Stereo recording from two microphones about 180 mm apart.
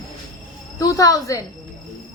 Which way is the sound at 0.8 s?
20° left (ahead or behind).